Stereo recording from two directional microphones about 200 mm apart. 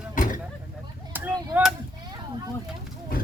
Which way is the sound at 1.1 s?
10° right (ahead or behind).